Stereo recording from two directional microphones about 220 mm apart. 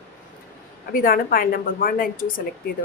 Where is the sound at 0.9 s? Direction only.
40° left (ahead or behind).